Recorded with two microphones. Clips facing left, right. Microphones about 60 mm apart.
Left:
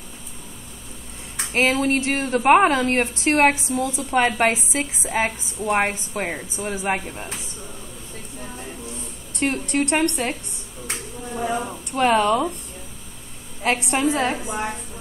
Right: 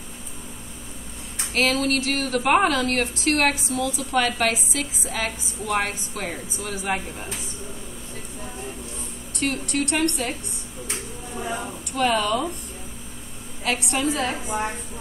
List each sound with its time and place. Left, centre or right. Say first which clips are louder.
1.5 s a woman's voice: left 2 dB; left
9.4 s a woman's voice: left 3 dB; left
11.9 s a woman's voice: left 4 dB; left
13.7 s a woman's voice: left 3 dB; left